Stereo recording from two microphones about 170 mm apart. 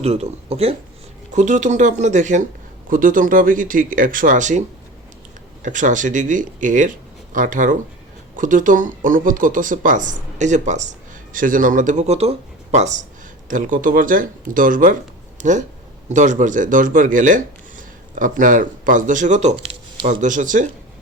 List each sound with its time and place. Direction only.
0.0 s speech: 40° right (ahead or behind)
5.6 s speech: 45° right (ahead or behind)